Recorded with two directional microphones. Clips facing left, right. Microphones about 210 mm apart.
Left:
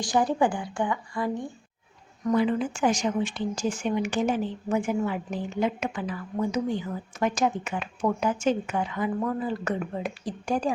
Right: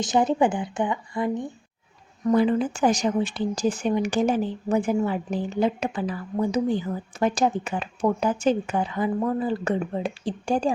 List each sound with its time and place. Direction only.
0.0 s a woman's voice: 20° right (ahead or behind)
2.2 s speech: 35° right (ahead or behind)